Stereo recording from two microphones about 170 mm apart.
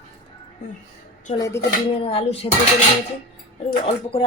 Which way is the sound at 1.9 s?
35° left (ahead or behind).